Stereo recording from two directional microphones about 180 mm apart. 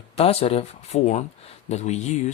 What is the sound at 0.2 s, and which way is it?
Speech, 35° left (ahead or behind).